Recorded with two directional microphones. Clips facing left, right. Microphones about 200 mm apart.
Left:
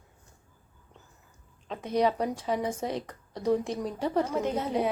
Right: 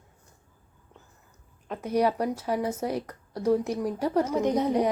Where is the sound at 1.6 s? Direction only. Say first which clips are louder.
Right 1 dB; 10° right (ahead or behind).